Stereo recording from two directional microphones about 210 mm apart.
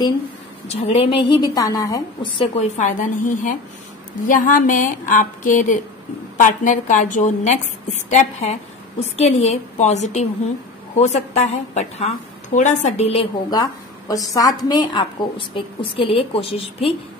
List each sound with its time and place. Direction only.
0.7 s a woman's voice: 30° left (ahead or behind)
2.4 s a woman's voice: 35° left (ahead or behind)